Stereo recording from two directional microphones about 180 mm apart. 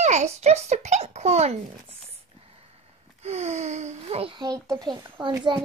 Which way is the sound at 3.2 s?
35° right (ahead or behind).